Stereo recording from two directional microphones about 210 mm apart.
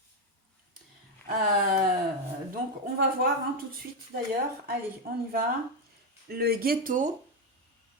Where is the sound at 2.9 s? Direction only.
45° right (ahead or behind).